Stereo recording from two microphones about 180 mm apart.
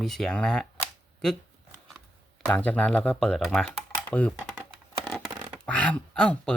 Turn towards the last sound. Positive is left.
turn(degrees=5)  # may be behind; listen again after turning